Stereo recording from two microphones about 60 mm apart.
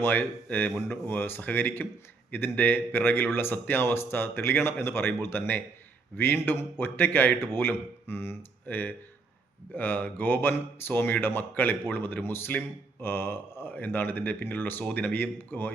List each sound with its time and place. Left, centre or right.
0.0 s a man's voice: left